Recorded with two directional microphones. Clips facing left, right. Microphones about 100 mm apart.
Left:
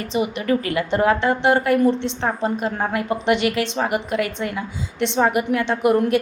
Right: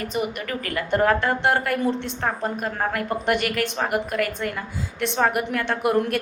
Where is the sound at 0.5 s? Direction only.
25° left (ahead or behind).